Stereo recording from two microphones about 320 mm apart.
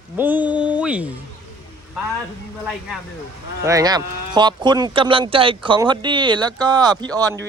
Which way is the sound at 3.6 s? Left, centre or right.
Centre.